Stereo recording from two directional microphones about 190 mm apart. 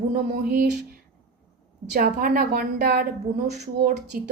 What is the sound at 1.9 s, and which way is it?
A woman's voice, 50° right (ahead or behind).